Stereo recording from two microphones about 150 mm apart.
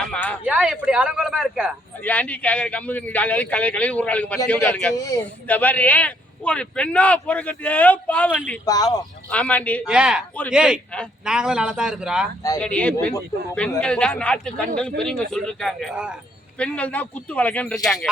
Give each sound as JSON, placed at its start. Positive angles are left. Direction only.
{"t": 0.0, "sound": "a sound", "side_deg": 5}
{"t": 0.4, "sound": "speech", "side_deg": -5}
{"t": 2.0, "sound": "a man's voice", "side_deg": 10}
{"t": 8.6, "sound": "speech", "side_deg": 25}
{"t": 9.3, "sound": "a man's voice", "side_deg": 10}
{"t": 9.8, "sound": "speech", "side_deg": -5}
{"t": 12.5, "sound": "a man's voice", "side_deg": 10}